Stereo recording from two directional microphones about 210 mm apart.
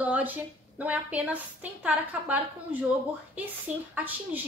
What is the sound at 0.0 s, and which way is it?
A woman's voice, 10° right (ahead or behind).